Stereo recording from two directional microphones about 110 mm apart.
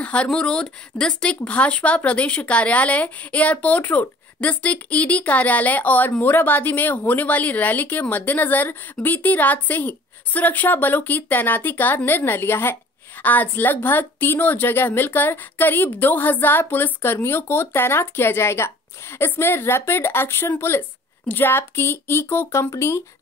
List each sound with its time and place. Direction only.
0.0 s a woman's voice: 10° left (ahead or behind); by 23.0 s 25° left (ahead or behind)